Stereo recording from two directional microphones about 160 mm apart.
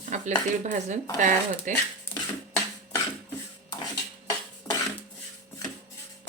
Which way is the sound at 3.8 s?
25° left (ahead or behind).